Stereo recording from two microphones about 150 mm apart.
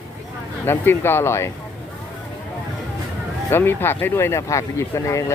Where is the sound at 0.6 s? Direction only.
15° left (ahead or behind).